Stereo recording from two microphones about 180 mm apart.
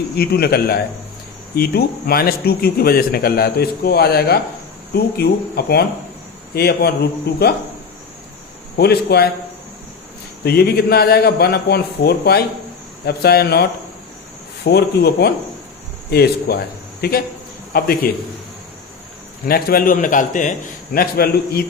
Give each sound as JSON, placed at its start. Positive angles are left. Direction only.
{"t": 0.2, "sound": "speech", "side_deg": 60}
{"t": 8.8, "sound": "speech", "side_deg": 65}
{"t": 10.4, "sound": "speech", "side_deg": 60}
{"t": 19.5, "sound": "a man's voice", "side_deg": 55}